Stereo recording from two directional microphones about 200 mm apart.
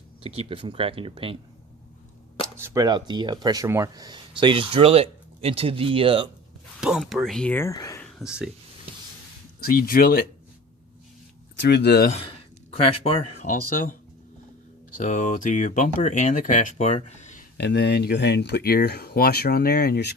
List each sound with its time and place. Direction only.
0.2 s speech: 30° right (ahead or behind)
2.6 s speech: 15° right (ahead or behind)
6.7 s speech: 5° right (ahead or behind); by 8.0 s 15° left (ahead or behind)
8.0 s a sound: 5° right (ahead or behind)
9.7 s speech: 45° left (ahead or behind)
11.7 s speech: 55° left (ahead or behind)
12.7 s speech: 30° left (ahead or behind)
14.9 s speech: 40° left (ahead or behind)
17.6 s speech: 55° left (ahead or behind)